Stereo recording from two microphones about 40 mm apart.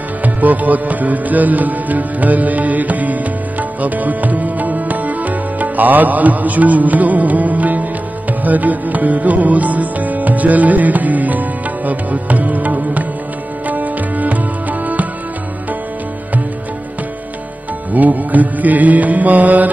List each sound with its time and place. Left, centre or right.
0.2 s music: right
17.9 s music: right